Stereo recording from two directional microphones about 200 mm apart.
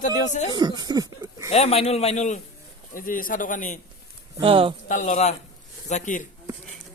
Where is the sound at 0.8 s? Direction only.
20° right (ahead or behind).